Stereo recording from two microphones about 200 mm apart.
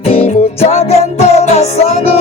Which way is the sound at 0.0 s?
30° left (ahead or behind).